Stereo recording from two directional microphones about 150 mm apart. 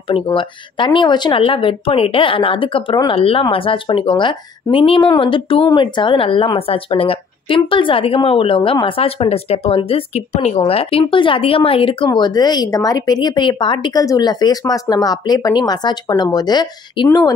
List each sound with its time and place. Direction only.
0.1 s speech: 35° left (ahead or behind)